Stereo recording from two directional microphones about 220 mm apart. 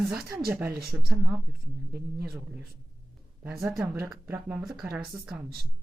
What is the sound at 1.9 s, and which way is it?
Speech, 45° right (ahead or behind).